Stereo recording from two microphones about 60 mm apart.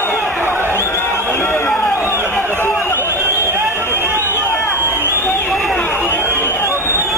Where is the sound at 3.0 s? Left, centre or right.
Right.